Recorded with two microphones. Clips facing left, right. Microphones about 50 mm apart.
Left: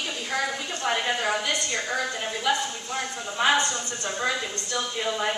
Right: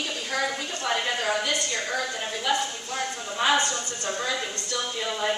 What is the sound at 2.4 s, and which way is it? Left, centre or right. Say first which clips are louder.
Speech: even; centre.